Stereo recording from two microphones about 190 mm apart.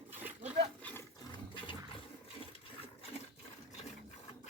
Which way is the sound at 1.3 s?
25° left (ahead or behind).